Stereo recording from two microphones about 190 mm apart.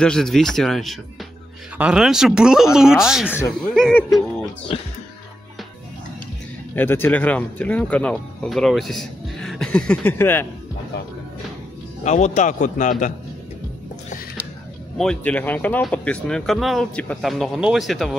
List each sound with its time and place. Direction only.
0.0 s speech: 5° left (ahead or behind)
3.3 s speech: 15° left (ahead or behind)
3.7 s speech: centre (ahead or behind)
6.7 s speech: 10° left (ahead or behind)
12.0 s speech: 40° left (ahead or behind)
15.0 s speech: 5° left (ahead or behind)